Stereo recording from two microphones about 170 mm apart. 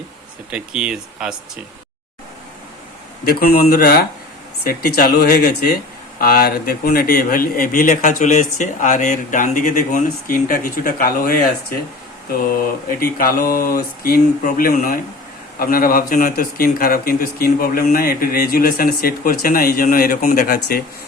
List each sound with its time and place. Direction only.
0.5 s speech: 5° right (ahead or behind)
3.2 s speech: 60° left (ahead or behind)
13.1 s speech: 55° left (ahead or behind)